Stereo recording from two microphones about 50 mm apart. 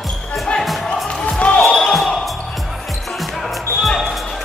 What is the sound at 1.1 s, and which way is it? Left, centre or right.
Music, centre.